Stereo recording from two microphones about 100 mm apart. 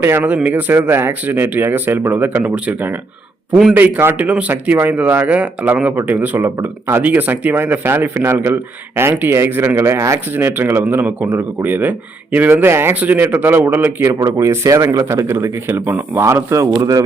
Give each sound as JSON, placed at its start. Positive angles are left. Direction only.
{"t": 0.4, "sound": "speech", "side_deg": -20}